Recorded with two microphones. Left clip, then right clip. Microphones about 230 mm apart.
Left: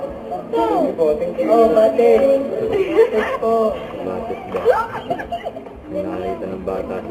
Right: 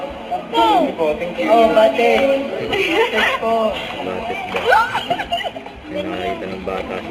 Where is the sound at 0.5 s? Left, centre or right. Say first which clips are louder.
Right 3 dB; centre.